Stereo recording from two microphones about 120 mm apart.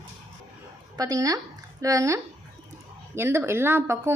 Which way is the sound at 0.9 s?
30° right (ahead or behind).